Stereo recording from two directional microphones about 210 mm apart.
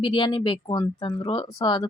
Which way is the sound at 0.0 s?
25° left (ahead or behind).